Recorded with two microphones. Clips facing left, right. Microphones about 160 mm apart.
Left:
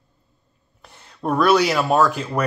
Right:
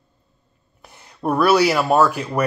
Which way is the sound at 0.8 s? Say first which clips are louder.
Right 1 dB; 10° right (ahead or behind).